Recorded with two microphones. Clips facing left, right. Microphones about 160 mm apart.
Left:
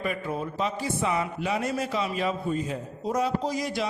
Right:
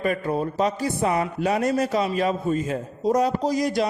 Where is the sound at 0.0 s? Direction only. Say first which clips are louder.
Right 6 dB; 45° right (ahead or behind).